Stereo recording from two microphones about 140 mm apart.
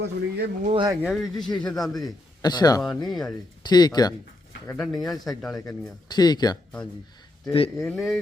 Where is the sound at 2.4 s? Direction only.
30° left (ahead or behind).